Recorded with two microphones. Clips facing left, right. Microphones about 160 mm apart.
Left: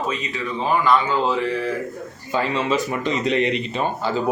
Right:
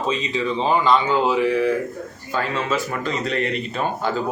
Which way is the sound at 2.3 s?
15° left (ahead or behind).